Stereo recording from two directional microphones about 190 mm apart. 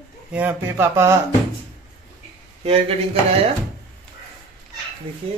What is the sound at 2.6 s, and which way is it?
Speech, 30° right (ahead or behind).